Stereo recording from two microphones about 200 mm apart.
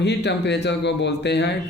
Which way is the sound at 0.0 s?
60° left (ahead or behind).